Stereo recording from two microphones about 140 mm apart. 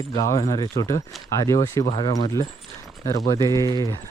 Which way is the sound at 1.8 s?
40° left (ahead or behind).